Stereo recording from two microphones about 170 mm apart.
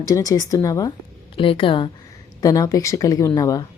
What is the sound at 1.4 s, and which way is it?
Speech, 30° left (ahead or behind).